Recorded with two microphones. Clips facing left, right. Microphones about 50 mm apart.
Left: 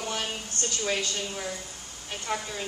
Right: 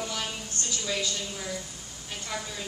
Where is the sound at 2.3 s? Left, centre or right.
Left.